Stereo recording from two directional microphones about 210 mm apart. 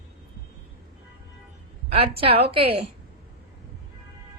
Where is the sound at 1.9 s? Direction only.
25° right (ahead or behind).